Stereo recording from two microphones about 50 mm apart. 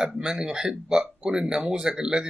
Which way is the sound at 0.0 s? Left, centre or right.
Centre.